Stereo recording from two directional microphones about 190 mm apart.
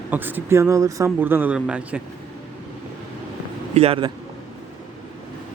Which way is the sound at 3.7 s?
30° right (ahead or behind).